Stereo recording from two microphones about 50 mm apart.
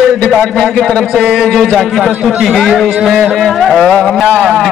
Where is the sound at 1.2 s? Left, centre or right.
Centre.